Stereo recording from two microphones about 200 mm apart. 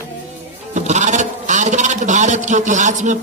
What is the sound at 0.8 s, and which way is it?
A man's voice, 35° right (ahead or behind).